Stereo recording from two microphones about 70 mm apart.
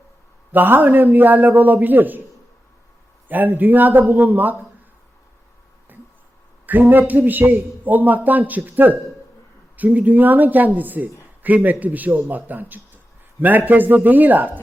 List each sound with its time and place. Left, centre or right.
0.5 s speech: right
3.2 s speech: right
6.7 s speech: right